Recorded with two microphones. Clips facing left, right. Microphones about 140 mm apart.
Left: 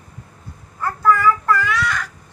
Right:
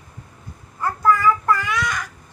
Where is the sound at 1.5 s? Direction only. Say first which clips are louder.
Left 2 dB; 15° right (ahead or behind).